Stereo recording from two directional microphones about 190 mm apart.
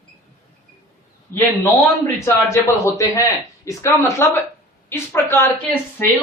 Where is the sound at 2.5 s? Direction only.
15° left (ahead or behind).